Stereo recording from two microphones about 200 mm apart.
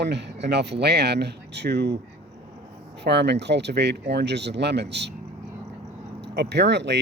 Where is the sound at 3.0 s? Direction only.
55° right (ahead or behind).